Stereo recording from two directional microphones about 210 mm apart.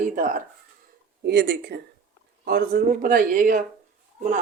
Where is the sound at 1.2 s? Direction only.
50° right (ahead or behind).